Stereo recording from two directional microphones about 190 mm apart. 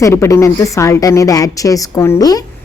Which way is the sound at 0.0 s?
15° left (ahead or behind).